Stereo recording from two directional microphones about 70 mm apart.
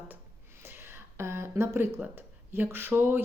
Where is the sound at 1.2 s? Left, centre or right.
Right.